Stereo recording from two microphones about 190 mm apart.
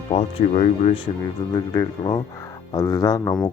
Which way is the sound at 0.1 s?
30° left (ahead or behind).